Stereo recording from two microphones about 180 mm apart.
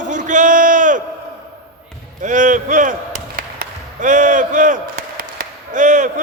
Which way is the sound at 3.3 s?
50° right (ahead or behind).